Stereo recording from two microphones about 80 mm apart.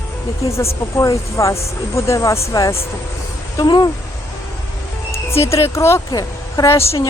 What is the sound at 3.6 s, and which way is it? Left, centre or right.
Speech, left.